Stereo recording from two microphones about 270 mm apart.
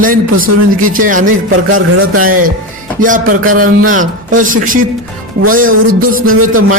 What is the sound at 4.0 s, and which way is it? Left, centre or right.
Speech, right.